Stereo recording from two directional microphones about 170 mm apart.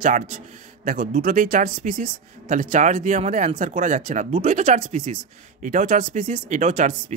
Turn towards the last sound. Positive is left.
turn(degrees=-45)  # may be behind; listen again after turning